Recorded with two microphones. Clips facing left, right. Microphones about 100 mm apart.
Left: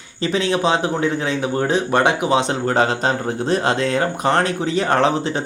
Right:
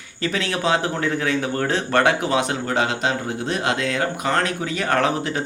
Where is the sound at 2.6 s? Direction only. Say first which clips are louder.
Left 4 dB; 40° left (ahead or behind).